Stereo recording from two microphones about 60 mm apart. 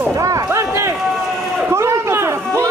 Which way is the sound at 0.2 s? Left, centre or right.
Right.